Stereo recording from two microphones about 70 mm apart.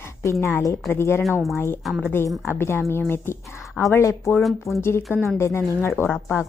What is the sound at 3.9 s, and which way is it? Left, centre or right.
Speech, left.